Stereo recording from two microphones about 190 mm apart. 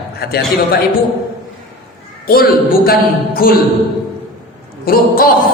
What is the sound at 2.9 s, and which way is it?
Speech, 50° left (ahead or behind).